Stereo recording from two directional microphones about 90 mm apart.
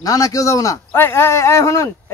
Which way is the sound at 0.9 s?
25° left (ahead or behind).